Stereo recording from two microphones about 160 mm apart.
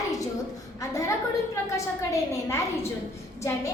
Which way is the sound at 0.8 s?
20° left (ahead or behind).